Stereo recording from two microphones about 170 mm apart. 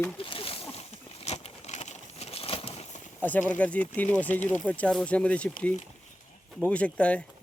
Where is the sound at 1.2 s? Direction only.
40° left (ahead or behind).